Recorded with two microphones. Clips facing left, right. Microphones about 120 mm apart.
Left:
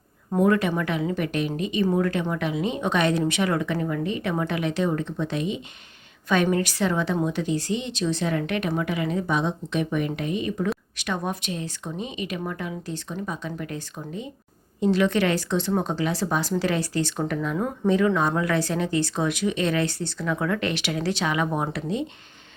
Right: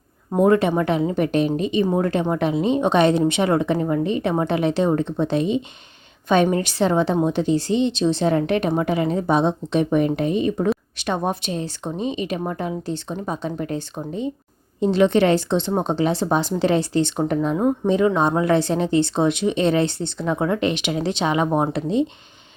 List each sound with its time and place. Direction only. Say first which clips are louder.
0.3 s a woman's voice: right 4 dB; 25° right (ahead or behind)